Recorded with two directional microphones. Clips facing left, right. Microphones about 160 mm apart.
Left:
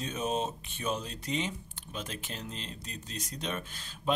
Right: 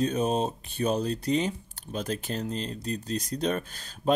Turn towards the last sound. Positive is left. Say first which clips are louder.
# right 8 dB
turn(degrees=-40)  # may be behind; listen again after turning